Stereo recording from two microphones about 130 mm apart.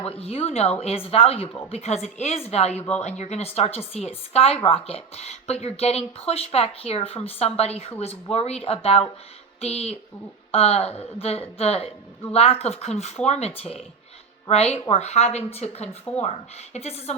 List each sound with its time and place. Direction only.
0.1 s a woman's voice: 50° left (ahead or behind)